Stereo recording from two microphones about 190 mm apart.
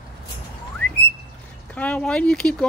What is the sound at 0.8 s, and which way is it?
Bird, 10° left (ahead or behind).